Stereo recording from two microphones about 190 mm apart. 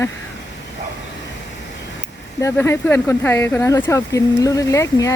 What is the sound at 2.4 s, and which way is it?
Speech, 15° left (ahead or behind).